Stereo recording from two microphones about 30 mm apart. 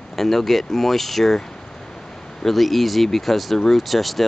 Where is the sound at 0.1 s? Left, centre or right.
Centre.